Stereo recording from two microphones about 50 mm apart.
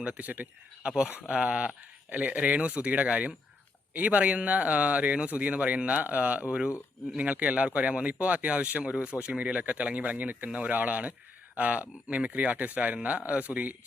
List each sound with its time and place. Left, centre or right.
0.0 s a man's voice: right
0.8 s a man's voice: centre